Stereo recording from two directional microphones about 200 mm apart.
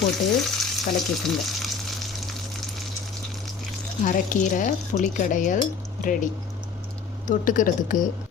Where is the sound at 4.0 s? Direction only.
40° left (ahead or behind).